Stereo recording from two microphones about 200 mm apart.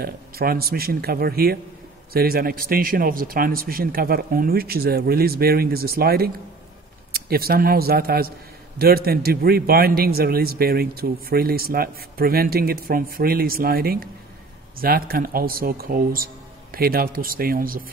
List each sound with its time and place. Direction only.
0.0 s a man's voice: 50° right (ahead or behind)